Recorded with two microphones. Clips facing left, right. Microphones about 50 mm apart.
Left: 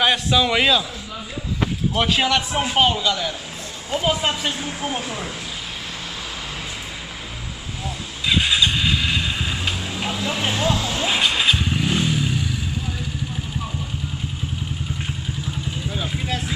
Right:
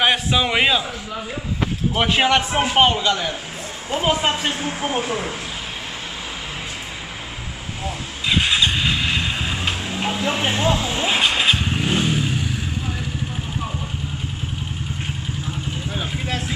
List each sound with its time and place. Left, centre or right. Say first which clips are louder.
0.0 s speech: even; centre
2.0 s speech: right 2 dB; right
3.1 s speech: right 2 dB; right
3.9 s speech: right 2 dB; centre
8.3 s vehicle: even; right
11.2 s motorcycle: right 1 dB; right
15.9 s vehicle: even; right